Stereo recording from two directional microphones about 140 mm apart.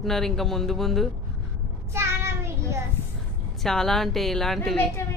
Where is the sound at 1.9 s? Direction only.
20° right (ahead or behind).